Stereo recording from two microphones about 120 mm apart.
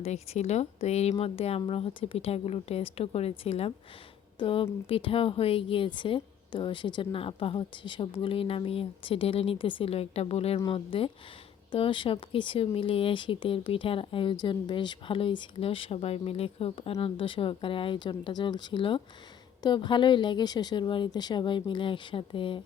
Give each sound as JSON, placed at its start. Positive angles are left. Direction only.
{"t": 0.0, "sound": "speech", "side_deg": 65}
{"t": 1.2, "sound": "speech", "side_deg": 55}
{"t": 4.4, "sound": "a woman's voice", "side_deg": 45}